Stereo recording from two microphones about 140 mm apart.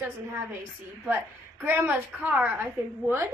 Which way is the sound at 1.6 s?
15° right (ahead or behind).